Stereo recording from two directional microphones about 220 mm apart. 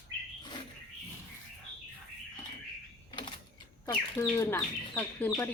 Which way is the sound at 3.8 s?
15° left (ahead or behind).